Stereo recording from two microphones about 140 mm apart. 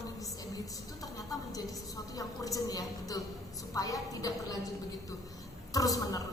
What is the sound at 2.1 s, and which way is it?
A woman's voice, 25° left (ahead or behind).